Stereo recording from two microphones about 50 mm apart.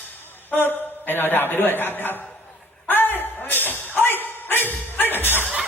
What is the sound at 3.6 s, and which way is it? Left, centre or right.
Music, left.